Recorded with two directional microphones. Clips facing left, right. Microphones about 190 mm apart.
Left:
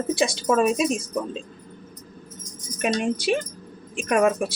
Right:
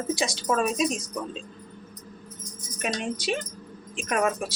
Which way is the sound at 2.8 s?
50° left (ahead or behind).